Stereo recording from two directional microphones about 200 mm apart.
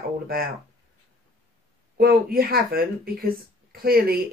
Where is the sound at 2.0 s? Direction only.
50° right (ahead or behind).